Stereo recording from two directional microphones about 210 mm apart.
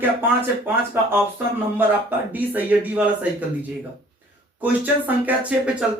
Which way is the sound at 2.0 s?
10° right (ahead or behind).